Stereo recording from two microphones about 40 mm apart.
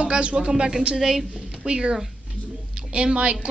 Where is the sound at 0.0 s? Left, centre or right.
Right.